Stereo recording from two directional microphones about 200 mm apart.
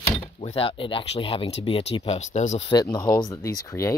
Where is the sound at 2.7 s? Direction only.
20° left (ahead or behind).